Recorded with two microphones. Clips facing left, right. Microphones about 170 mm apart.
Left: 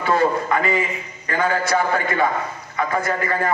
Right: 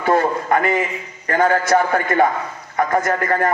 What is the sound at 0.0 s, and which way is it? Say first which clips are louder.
A man's voice: right 1 dB; 50° right (ahead or behind).